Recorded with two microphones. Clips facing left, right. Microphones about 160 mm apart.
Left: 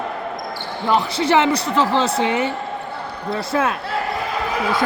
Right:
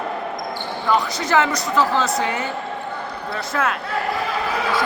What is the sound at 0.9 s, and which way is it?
A woman's voice, 25° left (ahead or behind).